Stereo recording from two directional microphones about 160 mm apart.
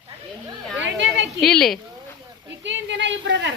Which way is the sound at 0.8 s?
90° right.